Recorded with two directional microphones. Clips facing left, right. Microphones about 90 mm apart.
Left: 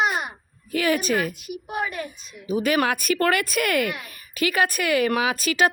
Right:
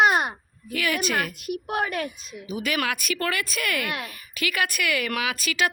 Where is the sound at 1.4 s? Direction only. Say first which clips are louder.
Right 2 dB; 60° right (ahead or behind).